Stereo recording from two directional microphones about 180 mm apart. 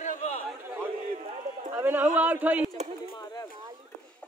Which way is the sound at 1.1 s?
40° right (ahead or behind).